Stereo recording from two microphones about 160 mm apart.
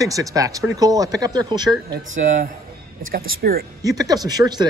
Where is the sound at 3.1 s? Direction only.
70° right (ahead or behind).